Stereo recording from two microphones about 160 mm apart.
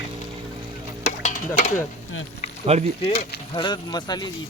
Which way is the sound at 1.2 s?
50° left (ahead or behind).